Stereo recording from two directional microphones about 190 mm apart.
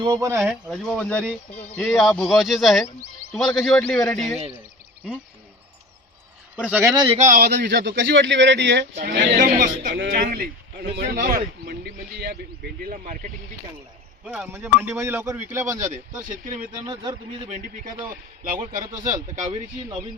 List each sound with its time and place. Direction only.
0.0 s speech: 20° right (ahead or behind)
0.7 s speech: 5° left (ahead or behind)
6.6 s speech: 5° right (ahead or behind)
7.2 s speech: 45° right (ahead or behind)
9.3 s a man's voice: 45° right (ahead or behind)
9.9 s speech: 70° right (ahead or behind)
10.2 s a man's voice: 50° right (ahead or behind)
14.3 s speech: 10° right (ahead or behind)
15.8 s a man's voice: 45° right (ahead or behind)
16.8 s speech: 20° right (ahead or behind)
18.1 s a man's voice: 45° right (ahead or behind)
19.5 s speech: 25° right (ahead or behind)